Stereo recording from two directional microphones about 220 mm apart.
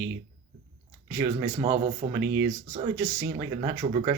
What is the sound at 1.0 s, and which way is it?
Speech, 15° right (ahead or behind).